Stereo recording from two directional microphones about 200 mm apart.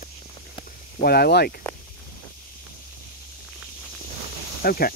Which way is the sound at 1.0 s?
50° left (ahead or behind).